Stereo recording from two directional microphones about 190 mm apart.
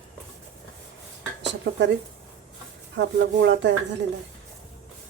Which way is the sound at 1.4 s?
70° right (ahead or behind).